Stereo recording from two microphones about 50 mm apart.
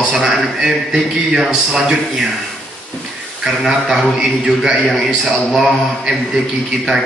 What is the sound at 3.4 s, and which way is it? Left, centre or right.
A man's voice, centre.